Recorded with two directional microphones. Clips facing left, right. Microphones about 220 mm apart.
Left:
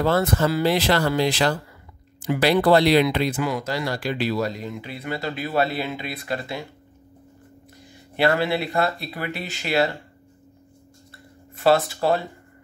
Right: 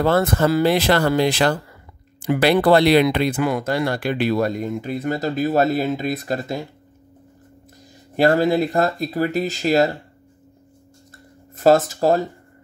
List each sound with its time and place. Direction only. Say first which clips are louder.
0.0 s speech: right 3 dB; 55° right (ahead or behind)
8.2 s speech: right 5 dB; 40° right (ahead or behind)
11.5 s speech: right 4 dB; 40° right (ahead or behind)